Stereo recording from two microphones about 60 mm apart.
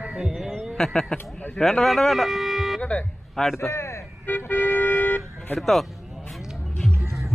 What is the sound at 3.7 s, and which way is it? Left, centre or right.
Vehicle, left.